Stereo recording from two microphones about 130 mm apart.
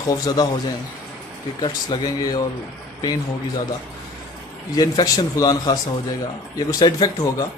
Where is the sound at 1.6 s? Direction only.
35° left (ahead or behind).